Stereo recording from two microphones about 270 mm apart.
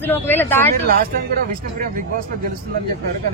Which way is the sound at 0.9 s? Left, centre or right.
Right.